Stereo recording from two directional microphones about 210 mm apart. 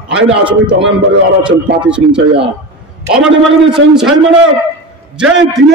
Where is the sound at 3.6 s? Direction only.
Centre (ahead or behind).